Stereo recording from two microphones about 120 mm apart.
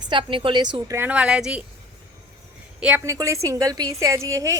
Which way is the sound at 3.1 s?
25° right (ahead or behind).